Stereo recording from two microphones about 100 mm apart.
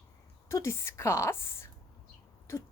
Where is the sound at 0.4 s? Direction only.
30° left (ahead or behind).